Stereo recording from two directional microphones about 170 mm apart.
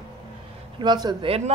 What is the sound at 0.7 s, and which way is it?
Speech, 25° right (ahead or behind).